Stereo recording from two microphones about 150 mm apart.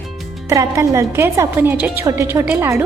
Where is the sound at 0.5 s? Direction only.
20° right (ahead or behind).